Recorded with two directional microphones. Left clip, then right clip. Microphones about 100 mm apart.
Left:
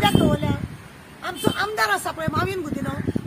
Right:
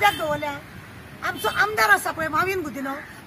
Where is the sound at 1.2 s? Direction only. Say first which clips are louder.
Right 2 dB; centre (ahead or behind).